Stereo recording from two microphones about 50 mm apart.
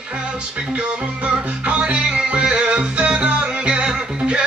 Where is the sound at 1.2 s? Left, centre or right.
Right.